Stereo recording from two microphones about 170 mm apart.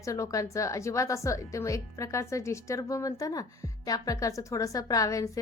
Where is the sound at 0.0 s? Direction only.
20° left (ahead or behind).